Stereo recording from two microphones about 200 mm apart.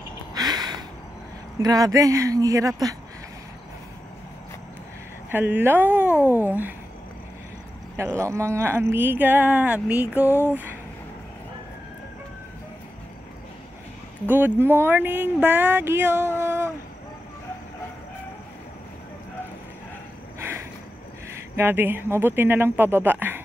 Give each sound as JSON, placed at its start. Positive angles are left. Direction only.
{"t": 0.3, "sound": "a sound", "side_deg": -20}
{"t": 1.6, "sound": "speech", "side_deg": -20}
{"t": 5.3, "sound": "speech", "side_deg": -10}
{"t": 6.0, "sound": "a sound", "side_deg": 10}
{"t": 6.4, "sound": "speech", "side_deg": -10}
{"t": 8.2, "sound": "speech", "side_deg": -15}
{"t": 10.2, "sound": "a sound", "side_deg": 10}
{"t": 14.2, "sound": "speech", "side_deg": -10}
{"t": 21.5, "sound": "speech", "side_deg": -10}